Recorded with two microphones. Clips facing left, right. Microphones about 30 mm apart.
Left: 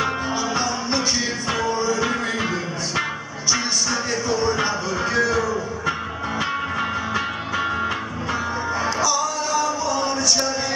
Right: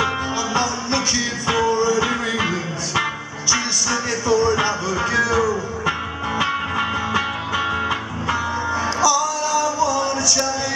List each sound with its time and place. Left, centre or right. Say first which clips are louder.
0.6 s music: right 2 dB; centre
2.0 s music: right 2 dB; centre
8.8 s music: right 4 dB; centre